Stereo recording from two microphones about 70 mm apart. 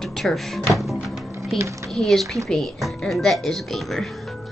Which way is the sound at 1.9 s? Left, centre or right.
Centre.